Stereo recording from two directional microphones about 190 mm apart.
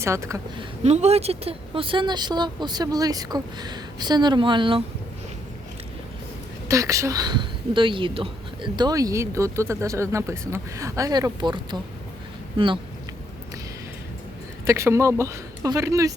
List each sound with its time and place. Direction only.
0.0 s a woman's voice: 15° right (ahead or behind)
0.8 s speech: 35° right (ahead or behind)
6.7 s a woman's voice: 15° right (ahead or behind)
14.7 s a woman's voice: 15° right (ahead or behind)